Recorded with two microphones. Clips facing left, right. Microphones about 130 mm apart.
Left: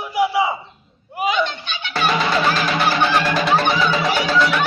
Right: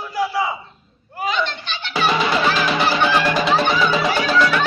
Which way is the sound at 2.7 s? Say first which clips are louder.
Even; 5° right (ahead or behind).